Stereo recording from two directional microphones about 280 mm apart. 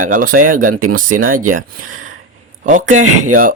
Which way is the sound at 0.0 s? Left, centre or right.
Right.